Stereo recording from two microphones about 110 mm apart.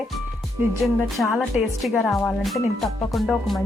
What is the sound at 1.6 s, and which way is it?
Speech, 10° right (ahead or behind).